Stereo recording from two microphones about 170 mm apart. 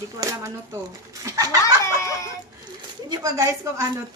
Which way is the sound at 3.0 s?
20° right (ahead or behind).